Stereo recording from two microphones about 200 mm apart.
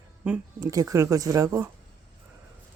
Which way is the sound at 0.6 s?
15° right (ahead or behind).